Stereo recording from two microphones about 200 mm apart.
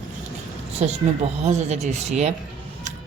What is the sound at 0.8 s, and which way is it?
A woman's voice, 35° right (ahead or behind).